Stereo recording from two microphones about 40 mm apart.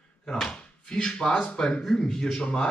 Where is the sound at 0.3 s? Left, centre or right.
Centre.